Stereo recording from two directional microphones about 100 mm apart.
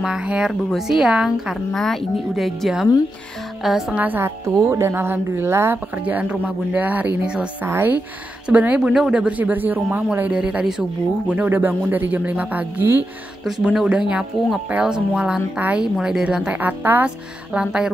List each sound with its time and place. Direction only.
0.0 s speech: 10° right (ahead or behind)
4.6 s speech: 30° right (ahead or behind); by 17.9 s 10° right (ahead or behind)